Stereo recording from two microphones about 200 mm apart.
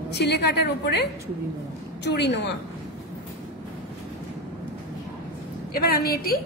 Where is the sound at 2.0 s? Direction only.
55° left (ahead or behind).